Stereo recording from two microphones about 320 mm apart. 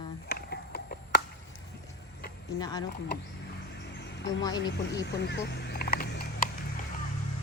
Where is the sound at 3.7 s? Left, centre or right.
Left.